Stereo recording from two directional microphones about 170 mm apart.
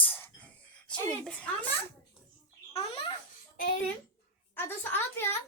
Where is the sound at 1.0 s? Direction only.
5° left (ahead or behind).